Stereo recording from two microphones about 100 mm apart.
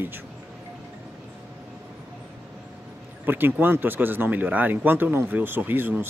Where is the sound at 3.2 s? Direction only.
20° right (ahead or behind).